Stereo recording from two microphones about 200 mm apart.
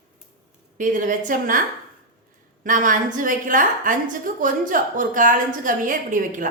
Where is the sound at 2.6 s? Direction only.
40° right (ahead or behind).